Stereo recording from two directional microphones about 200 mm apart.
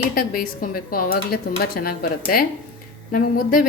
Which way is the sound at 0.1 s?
45° left (ahead or behind).